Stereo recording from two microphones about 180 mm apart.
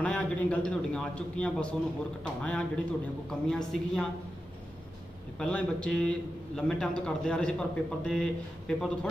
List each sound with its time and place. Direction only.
0.0 s a man's voice: 5° left (ahead or behind)
5.4 s a man's voice: 5° left (ahead or behind)